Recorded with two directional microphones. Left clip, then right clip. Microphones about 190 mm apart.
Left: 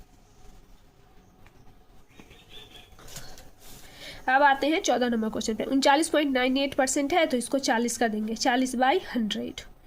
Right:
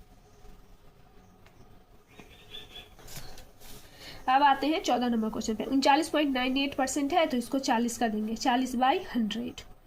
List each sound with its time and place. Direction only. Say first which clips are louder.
4.0 s a woman's voice: left 2 dB; 40° left (ahead or behind)